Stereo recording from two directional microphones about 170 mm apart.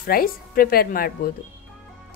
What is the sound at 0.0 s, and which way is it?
A woman's voice, 60° left (ahead or behind).